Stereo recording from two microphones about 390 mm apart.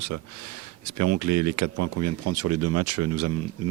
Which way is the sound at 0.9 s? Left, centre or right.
Right.